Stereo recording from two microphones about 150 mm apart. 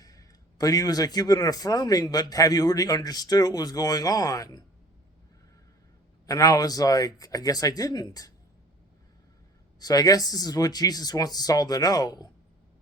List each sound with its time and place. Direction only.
0.0 s a man's voice: 25° left (ahead or behind)
6.2 s a man's voice: 25° left (ahead or behind)
9.8 s a man's voice: 25° left (ahead or behind)